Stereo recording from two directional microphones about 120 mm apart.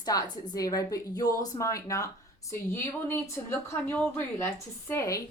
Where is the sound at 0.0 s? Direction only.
35° left (ahead or behind).